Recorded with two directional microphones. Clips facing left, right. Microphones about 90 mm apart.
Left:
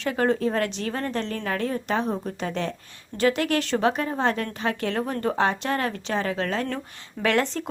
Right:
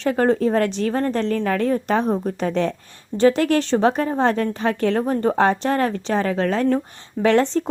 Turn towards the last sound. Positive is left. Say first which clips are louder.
# right 6 dB
turn(degrees=-30)  # may be behind; listen again after turning